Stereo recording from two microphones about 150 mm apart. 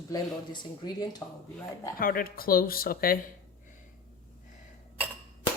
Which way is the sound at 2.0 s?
70° left (ahead or behind).